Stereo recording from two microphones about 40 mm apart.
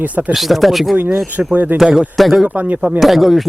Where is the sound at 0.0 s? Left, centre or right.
Right.